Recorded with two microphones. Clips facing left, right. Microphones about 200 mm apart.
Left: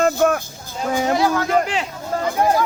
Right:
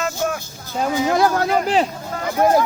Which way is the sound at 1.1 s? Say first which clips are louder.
Right 1 dB; 45° right (ahead or behind).